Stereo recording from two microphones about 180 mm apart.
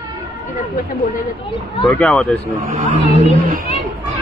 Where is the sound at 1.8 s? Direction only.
5° left (ahead or behind).